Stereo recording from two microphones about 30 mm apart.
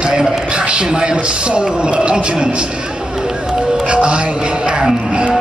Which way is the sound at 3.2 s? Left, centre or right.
Right.